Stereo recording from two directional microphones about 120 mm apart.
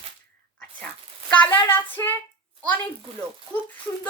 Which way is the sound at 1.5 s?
20° left (ahead or behind).